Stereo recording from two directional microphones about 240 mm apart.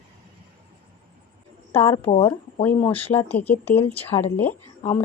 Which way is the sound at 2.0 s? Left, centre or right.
Left.